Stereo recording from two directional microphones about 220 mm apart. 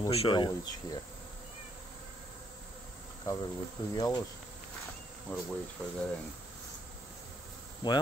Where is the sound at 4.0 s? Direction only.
20° left (ahead or behind).